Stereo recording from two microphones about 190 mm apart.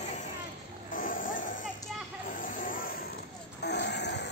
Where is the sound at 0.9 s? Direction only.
45° left (ahead or behind).